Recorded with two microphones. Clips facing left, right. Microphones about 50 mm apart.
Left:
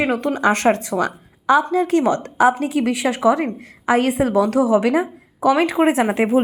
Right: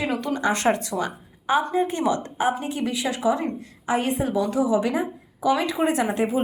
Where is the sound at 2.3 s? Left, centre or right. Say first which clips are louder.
Left 8 dB; left.